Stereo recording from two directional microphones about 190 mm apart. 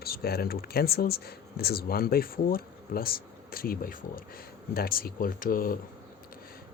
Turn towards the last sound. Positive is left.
turn(degrees=50)  # may be behind; listen again after turning